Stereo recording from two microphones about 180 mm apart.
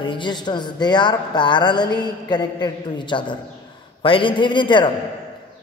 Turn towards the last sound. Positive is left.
turn(degrees=25)  # may be behind; listen again after turning